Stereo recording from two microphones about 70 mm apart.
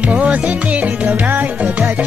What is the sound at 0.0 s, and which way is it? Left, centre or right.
Music, centre.